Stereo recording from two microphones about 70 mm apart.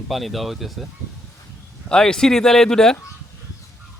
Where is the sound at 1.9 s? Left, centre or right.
Centre.